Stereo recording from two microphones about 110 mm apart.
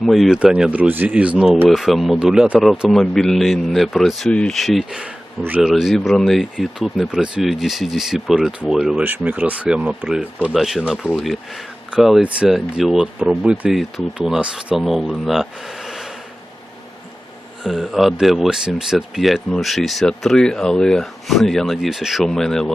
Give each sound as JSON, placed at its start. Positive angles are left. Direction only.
{"t": 0.0, "sound": "speech", "side_deg": 0}
{"t": 0.3, "sound": "speech", "side_deg": -10}
{"t": 1.6, "sound": "speech", "side_deg": 0}
{"t": 5.6, "sound": "speech", "side_deg": -5}
{"t": 17.6, "sound": "speech", "side_deg": 0}